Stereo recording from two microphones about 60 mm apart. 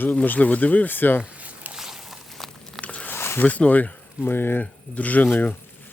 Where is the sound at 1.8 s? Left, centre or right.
Centre.